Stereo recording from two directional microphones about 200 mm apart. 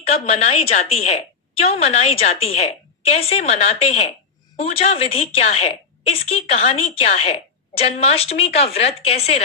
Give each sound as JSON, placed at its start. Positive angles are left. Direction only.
{"t": 0.0, "sound": "a woman's voice", "side_deg": 30}